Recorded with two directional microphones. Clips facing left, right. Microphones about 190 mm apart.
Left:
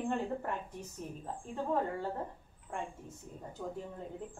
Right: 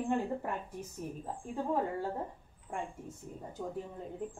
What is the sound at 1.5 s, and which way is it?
Speech, 10° right (ahead or behind).